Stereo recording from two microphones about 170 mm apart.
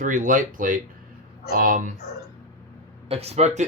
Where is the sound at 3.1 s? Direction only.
35° right (ahead or behind).